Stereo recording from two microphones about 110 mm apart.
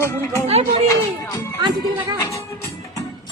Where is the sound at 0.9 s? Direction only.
30° left (ahead or behind).